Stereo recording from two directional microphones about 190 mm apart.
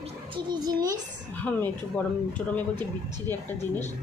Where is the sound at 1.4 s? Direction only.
10° left (ahead or behind).